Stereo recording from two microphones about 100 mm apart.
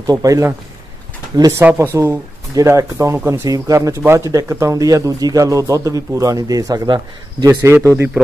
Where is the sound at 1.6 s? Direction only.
20° right (ahead or behind); by 7.4 s 45° right (ahead or behind).